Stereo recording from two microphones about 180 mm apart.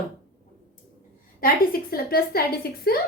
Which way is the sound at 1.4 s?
55° left (ahead or behind).